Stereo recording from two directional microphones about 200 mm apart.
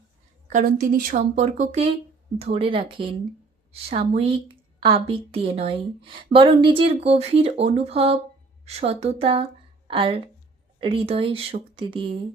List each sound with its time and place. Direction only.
0.5 s a woman's voice: 45° right (ahead or behind); by 12.2 s 25° right (ahead or behind)